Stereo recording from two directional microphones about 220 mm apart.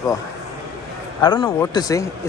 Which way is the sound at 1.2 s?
20° left (ahead or behind).